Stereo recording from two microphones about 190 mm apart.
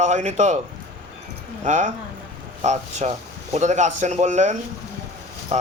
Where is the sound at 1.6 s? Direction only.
40° right (ahead or behind).